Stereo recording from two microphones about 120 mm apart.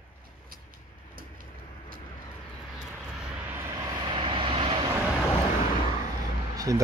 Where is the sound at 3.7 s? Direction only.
35° right (ahead or behind).